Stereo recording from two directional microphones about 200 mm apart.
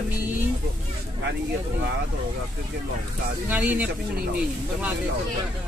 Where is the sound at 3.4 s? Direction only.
10° right (ahead or behind).